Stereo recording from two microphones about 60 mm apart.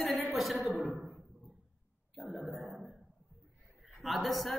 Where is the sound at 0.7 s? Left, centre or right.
Right.